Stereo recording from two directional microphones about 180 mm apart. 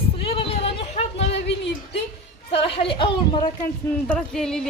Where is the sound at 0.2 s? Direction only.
30° left (ahead or behind).